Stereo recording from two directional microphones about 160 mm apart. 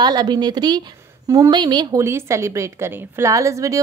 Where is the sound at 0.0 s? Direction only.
25° right (ahead or behind).